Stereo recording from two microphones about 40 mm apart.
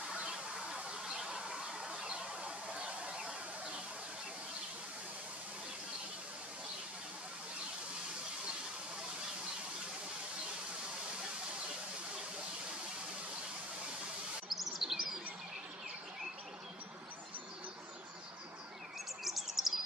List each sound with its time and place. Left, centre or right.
1.0 s a sound: centre
14.5 s chirp: centre
19.2 s chirp: centre